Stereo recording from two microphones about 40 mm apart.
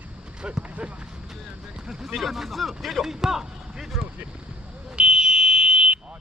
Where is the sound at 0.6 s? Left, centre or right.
Right.